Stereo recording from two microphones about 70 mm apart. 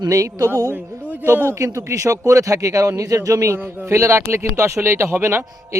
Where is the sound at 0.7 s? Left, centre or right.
Right.